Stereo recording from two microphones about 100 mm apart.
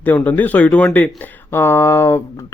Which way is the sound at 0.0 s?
15° left (ahead or behind).